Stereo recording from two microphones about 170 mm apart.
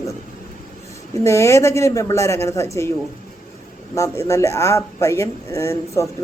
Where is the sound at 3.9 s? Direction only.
15° left (ahead or behind).